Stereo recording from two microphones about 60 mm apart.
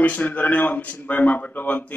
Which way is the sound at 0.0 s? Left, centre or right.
Left.